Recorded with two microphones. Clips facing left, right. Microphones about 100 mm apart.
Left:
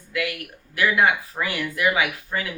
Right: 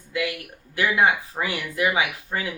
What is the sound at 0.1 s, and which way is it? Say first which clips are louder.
Speech: even; 25° right (ahead or behind).